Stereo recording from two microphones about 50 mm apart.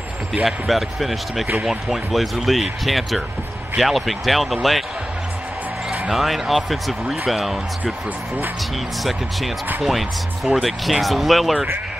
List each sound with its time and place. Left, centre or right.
0.3 s speech: centre
6.1 s speech: centre
9.8 s speech: centre